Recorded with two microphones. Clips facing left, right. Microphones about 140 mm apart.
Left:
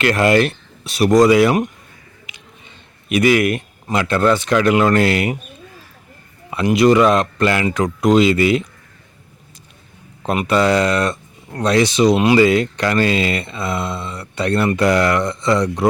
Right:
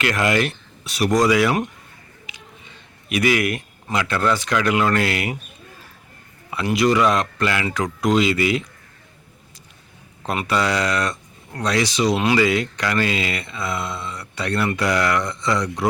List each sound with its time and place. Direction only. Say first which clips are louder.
0.0 s speech: left 6 dB; 30° left (ahead or behind)
3.1 s speech: left 5 dB; 25° left (ahead or behind)
6.5 s speech: left 6 dB; 20° left (ahead or behind)
10.2 s speech: left 6 dB; 25° left (ahead or behind)